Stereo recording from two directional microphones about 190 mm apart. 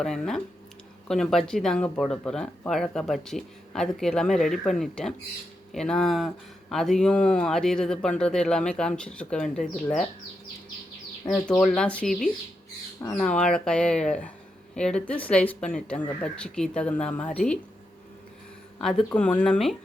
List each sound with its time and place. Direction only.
0.0 s speech: centre (ahead or behind)
11.3 s speech: 25° left (ahead or behind)
11.6 s speech: 5° left (ahead or behind)
18.8 s speech: centre (ahead or behind)